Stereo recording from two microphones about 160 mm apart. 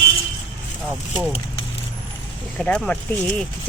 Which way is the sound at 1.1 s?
10° right (ahead or behind).